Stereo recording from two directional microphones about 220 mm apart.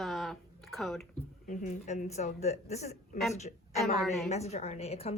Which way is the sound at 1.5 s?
30° left (ahead or behind).